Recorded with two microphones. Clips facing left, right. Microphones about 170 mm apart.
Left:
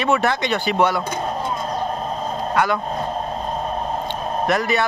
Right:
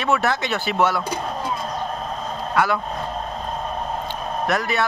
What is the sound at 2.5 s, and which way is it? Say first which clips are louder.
Speech: even; 5° right (ahead or behind).